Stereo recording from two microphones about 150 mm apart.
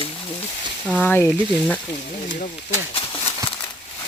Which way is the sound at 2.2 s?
60° left (ahead or behind).